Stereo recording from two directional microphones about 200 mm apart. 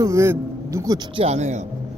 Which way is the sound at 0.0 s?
15° right (ahead or behind).